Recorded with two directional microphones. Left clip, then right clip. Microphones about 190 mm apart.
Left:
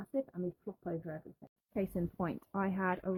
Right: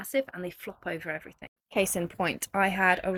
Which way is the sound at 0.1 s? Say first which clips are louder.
Right 9 dB; 5° right (ahead or behind).